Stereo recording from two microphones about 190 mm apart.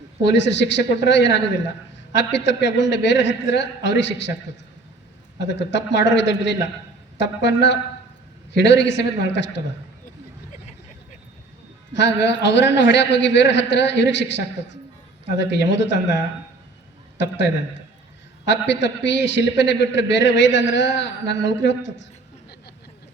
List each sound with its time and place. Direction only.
0.2 s a man's voice: 65° left (ahead or behind)
5.4 s a man's voice: 70° left (ahead or behind)
11.9 s a man's voice: 70° left (ahead or behind)